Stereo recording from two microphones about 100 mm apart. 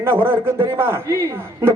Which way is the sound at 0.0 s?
25° right (ahead or behind).